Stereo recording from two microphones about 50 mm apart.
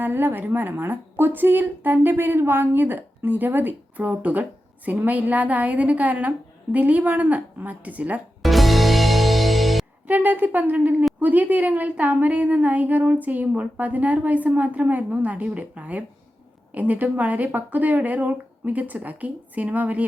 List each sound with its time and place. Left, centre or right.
0.0 s a woman's voice: right
8.4 s music: centre
10.1 s a woman's voice: right